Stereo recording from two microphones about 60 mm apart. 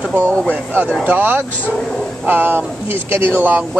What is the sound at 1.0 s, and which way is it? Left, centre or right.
Speech, right.